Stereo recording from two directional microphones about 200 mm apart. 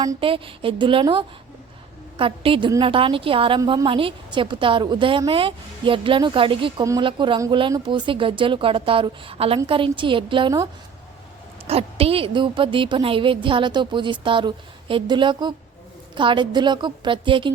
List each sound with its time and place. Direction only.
0.0 s a woman's voice: 25° right (ahead or behind)
11.7 s a woman's voice: 30° right (ahead or behind)